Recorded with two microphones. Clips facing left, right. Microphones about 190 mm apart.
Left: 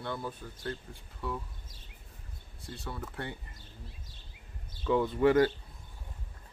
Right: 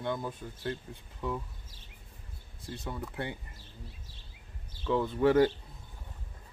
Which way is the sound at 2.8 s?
15° right (ahead or behind).